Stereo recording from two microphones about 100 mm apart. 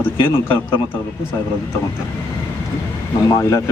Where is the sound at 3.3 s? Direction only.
30° left (ahead or behind).